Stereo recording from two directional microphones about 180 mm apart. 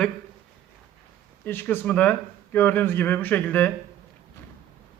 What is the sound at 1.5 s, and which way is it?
A man's voice, 10° left (ahead or behind).